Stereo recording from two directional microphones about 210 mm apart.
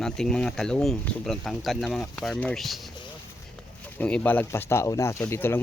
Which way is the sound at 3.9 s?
5° left (ahead or behind).